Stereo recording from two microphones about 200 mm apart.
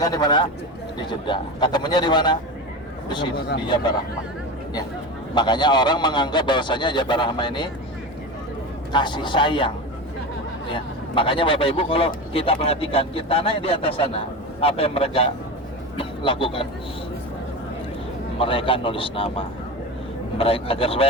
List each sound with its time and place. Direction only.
0.0 s a man's voice: 20° left (ahead or behind)
5.3 s a man's voice: 20° left (ahead or behind)
8.9 s a man's voice: 25° left (ahead or behind)
18.3 s a man's voice: 25° left (ahead or behind)